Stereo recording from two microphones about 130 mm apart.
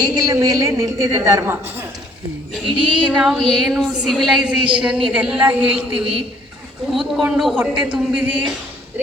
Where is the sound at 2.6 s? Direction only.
5° right (ahead or behind).